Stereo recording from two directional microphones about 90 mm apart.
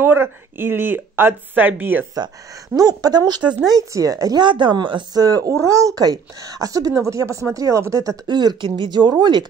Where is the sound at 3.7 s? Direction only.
40° right (ahead or behind).